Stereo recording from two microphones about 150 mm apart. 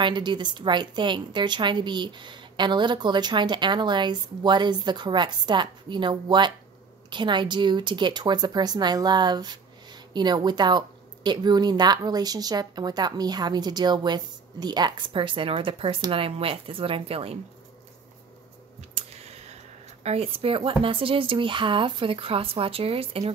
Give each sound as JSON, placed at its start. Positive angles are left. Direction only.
{"t": 0.0, "sound": "a woman's voice", "side_deg": -30}
{"t": 18.8, "sound": "speech", "side_deg": -45}